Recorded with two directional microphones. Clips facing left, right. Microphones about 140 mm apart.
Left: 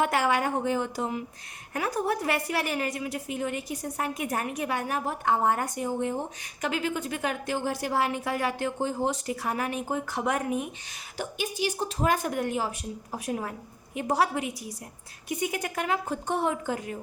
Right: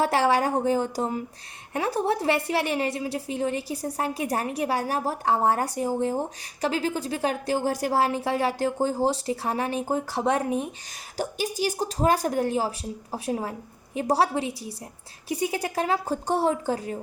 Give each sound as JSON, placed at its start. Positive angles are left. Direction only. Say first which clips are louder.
{"t": 0.0, "sound": "a woman's voice", "louder": "right 3 dB", "side_deg": -30}